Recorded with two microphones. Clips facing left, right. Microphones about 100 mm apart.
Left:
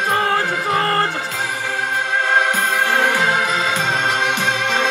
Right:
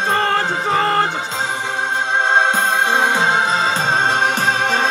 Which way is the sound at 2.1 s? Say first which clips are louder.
Right 2 dB; 25° right (ahead or behind).